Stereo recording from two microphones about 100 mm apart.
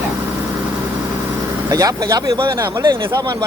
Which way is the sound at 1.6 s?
35° right (ahead or behind).